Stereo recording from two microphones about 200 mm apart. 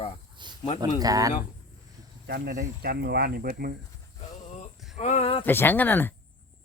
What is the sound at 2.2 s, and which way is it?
Speech, 50° right (ahead or behind).